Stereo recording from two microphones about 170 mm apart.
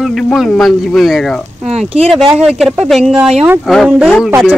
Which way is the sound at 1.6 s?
35° right (ahead or behind).